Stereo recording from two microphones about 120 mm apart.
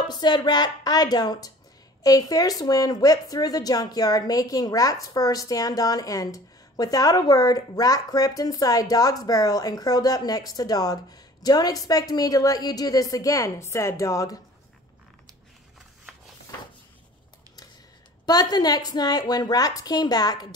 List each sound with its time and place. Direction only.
0.1 s speech: 35° left (ahead or behind)
18.2 s speech: 35° left (ahead or behind)